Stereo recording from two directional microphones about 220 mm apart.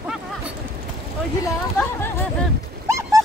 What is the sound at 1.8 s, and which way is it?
Hubbub, 10° left (ahead or behind).